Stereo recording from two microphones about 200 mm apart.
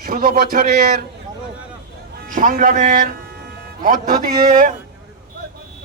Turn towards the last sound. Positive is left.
turn(degrees=-40)  # may be behind; listen again after turning